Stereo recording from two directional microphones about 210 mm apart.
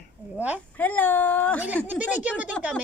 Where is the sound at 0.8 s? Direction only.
10° left (ahead or behind).